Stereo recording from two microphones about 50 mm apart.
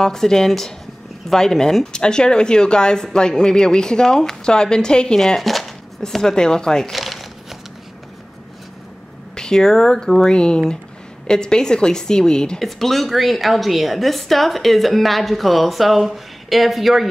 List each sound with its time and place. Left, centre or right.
0.0 s speech: centre
5.4 s speech: centre
6.9 s crumpling: centre
9.3 s speech: centre
12.5 s a woman's voice: centre